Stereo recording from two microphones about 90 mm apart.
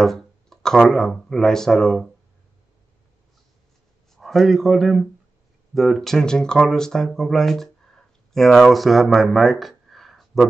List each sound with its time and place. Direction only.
0.0 s speech: 5° left (ahead or behind)
4.1 s a man's voice: centre (ahead or behind)